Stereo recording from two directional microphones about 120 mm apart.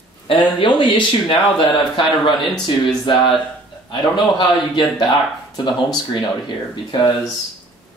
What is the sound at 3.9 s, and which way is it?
Speech, 40° left (ahead or behind).